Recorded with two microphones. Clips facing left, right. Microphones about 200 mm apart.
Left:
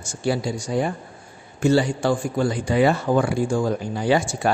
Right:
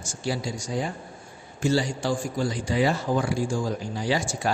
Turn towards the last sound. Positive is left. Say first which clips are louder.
# left 6 dB
turn(degrees=60)  # may be behind; listen again after turning